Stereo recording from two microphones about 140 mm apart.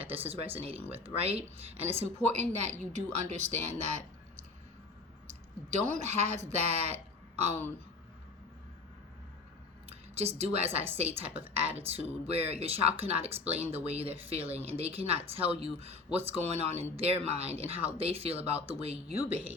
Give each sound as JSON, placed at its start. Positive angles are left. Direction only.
{"t": 0.9, "sound": "speech", "side_deg": -45}
{"t": 9.9, "sound": "a woman's voice", "side_deg": -50}
{"t": 19.2, "sound": "speech", "side_deg": -15}